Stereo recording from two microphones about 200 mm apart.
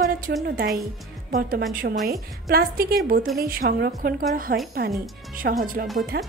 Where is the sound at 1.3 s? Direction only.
50° right (ahead or behind).